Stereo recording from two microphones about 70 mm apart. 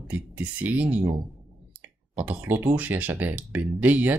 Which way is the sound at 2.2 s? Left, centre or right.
Right.